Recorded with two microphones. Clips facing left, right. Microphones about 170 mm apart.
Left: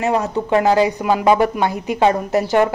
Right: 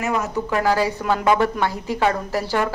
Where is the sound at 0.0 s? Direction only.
30° left (ahead or behind).